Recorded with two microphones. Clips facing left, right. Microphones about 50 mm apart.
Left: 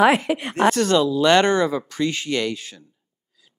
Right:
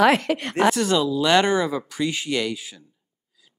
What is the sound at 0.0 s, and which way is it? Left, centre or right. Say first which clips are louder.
Speech: left 1 dB; centre.